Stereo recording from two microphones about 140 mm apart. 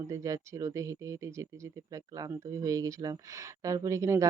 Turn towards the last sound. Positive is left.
turn(degrees=-20)  # may be behind; listen again after turning